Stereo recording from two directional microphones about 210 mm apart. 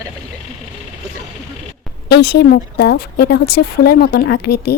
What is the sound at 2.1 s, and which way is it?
Speech, 50° left (ahead or behind).